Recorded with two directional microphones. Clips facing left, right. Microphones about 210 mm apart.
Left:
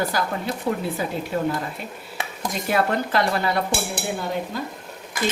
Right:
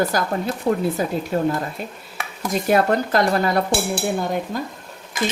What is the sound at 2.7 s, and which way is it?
Speech, 45° right (ahead or behind).